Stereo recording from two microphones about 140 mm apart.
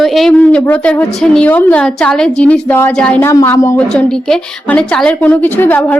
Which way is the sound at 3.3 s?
20° left (ahead or behind).